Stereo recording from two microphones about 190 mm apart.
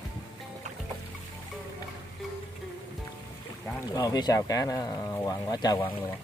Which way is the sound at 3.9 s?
20° left (ahead or behind).